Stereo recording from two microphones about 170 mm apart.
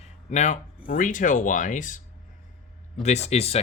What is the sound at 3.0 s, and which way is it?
Speech, 40° left (ahead or behind).